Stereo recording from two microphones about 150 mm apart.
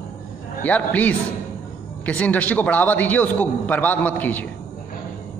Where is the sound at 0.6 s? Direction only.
10° left (ahead or behind).